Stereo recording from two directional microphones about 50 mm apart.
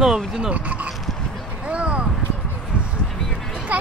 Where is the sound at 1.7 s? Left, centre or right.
Right.